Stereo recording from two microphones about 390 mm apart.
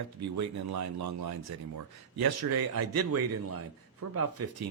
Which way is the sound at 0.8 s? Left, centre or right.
Right.